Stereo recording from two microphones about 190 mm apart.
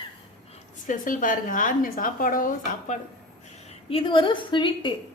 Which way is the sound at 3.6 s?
30° left (ahead or behind).